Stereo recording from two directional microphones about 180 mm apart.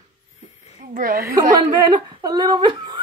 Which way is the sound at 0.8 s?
50° right (ahead or behind).